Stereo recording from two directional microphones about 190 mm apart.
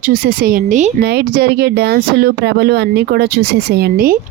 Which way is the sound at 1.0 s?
55° right (ahead or behind).